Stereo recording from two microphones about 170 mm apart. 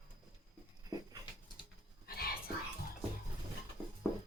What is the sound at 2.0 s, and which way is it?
Whispering, 65° left (ahead or behind).